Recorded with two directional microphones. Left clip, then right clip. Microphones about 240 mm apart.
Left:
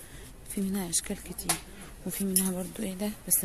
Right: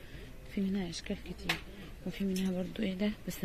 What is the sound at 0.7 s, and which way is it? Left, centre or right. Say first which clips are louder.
Speech: left 5 dB; centre.